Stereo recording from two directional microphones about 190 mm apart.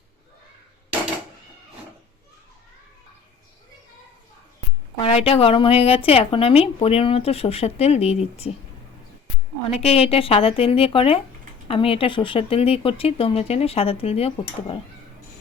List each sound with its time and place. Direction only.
4.9 s speech: 30° left (ahead or behind)
9.7 s speech: 30° left (ahead or behind)